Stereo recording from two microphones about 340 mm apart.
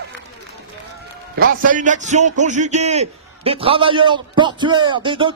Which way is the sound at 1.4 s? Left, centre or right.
Right.